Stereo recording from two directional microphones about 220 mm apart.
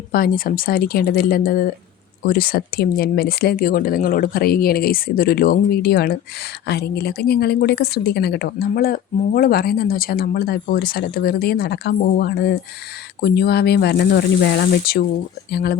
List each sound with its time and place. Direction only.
0.1 s a woman's voice: 40° left (ahead or behind)